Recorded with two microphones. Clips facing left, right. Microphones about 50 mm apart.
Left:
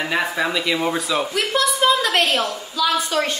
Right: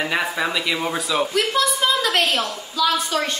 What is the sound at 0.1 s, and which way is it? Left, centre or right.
A woman's voice, centre.